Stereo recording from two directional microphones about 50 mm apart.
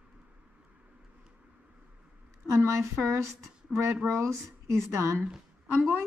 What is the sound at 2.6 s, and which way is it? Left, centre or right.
Speech, right.